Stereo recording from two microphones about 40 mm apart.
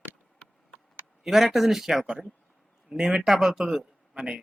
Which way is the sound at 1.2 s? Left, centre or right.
Centre.